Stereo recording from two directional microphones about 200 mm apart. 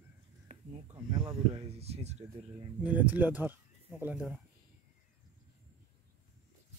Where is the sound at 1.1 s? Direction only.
20° right (ahead or behind).